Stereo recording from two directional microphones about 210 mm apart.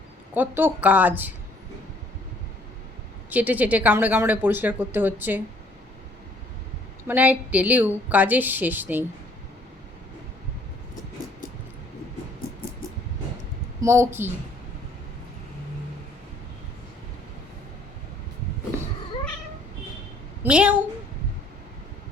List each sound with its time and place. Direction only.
0.3 s speech: 10° right (ahead or behind)
3.2 s speech: 5° right (ahead or behind)
7.1 s speech: 5° right (ahead or behind)
13.8 s speech: 15° right (ahead or behind)
20.4 s a woman's voice: 5° right (ahead or behind)